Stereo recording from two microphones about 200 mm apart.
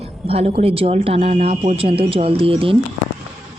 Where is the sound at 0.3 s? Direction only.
30° right (ahead or behind).